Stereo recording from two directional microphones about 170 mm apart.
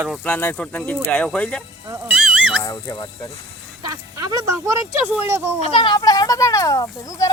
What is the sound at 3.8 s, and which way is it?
Speech, 20° right (ahead or behind).